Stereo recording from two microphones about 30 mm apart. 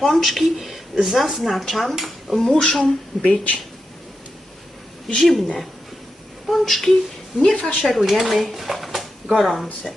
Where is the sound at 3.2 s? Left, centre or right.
Left.